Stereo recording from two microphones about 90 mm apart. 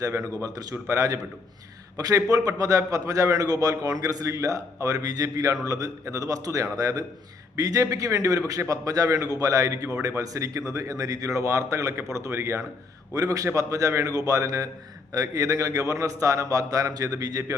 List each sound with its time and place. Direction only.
0.0 s a man's voice: 35° right (ahead or behind)
13.1 s a man's voice: 40° right (ahead or behind)